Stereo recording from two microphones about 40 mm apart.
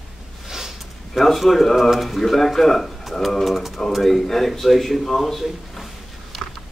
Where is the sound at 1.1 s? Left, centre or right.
Centre.